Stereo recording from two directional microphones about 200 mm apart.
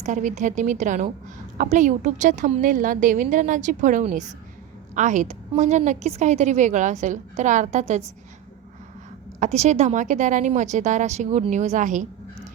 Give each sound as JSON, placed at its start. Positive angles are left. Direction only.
{"t": 0.0, "sound": "a woman's voice", "side_deg": -35}
{"t": 9.4, "sound": "a woman's voice", "side_deg": -35}